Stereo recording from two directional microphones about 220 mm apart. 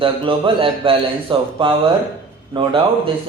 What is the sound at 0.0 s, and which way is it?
Speech, 25° right (ahead or behind).